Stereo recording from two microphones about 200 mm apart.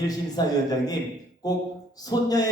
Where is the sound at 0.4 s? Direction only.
20° left (ahead or behind).